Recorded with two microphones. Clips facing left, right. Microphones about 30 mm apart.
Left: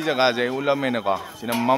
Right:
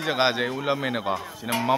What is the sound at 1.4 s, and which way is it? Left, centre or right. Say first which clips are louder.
Speech: left 1 dB; centre.